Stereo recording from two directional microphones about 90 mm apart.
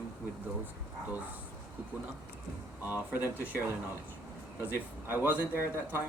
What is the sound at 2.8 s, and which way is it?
Speech, 20° right (ahead or behind).